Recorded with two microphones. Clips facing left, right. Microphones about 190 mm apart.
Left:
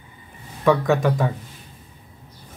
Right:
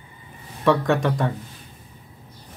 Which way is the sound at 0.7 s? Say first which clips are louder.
Left 1 dB; centre (ahead or behind).